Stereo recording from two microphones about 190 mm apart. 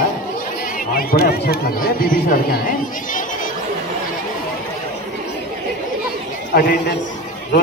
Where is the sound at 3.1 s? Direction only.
45° left (ahead or behind).